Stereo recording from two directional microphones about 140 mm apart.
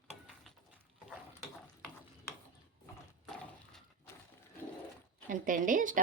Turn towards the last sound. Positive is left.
turn(degrees=-70)  # may be behind; listen again after turning